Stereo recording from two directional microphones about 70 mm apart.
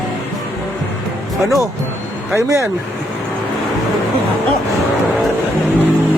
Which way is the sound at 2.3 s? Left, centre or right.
Right.